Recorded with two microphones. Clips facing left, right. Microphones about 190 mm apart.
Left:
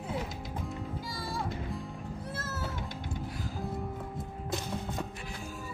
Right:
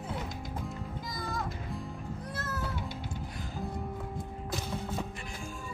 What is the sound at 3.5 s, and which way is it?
Music, centre (ahead or behind).